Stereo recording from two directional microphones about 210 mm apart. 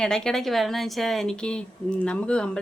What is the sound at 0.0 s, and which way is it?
A woman's voice, centre (ahead or behind).